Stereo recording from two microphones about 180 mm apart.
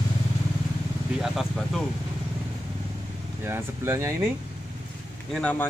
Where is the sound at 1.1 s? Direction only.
Centre (ahead or behind).